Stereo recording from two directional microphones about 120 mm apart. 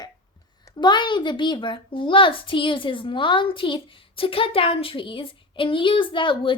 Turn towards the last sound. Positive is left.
turn(degrees=45)  # may be behind; listen again after turning